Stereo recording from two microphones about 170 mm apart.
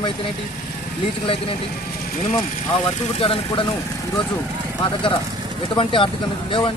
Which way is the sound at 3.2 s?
35° left (ahead or behind).